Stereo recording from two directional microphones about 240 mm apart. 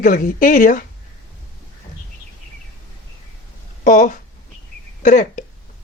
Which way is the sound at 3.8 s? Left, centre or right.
Left.